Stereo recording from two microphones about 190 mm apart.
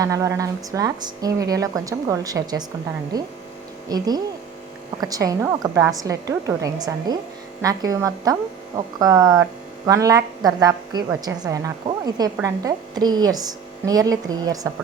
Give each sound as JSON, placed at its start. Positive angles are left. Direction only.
{"t": 0.0, "sound": "a woman's voice", "side_deg": -15}